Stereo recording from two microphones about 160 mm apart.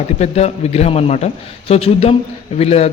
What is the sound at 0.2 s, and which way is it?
A man's voice, 40° left (ahead or behind).